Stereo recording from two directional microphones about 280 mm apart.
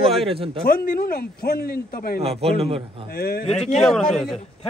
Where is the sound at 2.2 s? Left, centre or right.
Right.